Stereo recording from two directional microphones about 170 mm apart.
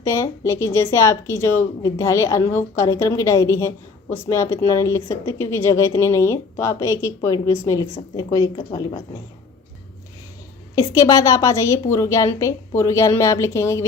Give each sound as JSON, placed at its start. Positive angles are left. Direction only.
{"t": 0.0, "sound": "a woman's voice", "side_deg": 15}
{"t": 10.8, "sound": "a woman's voice", "side_deg": 20}